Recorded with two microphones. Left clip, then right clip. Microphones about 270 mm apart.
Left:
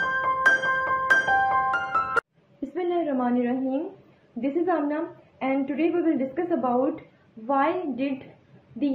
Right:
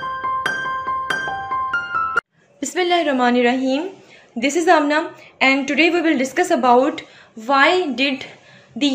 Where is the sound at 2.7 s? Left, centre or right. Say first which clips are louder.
Right 9 dB; right.